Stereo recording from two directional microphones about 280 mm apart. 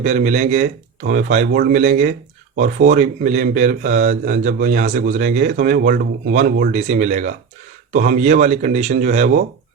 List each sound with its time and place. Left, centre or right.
0.0 s speech: right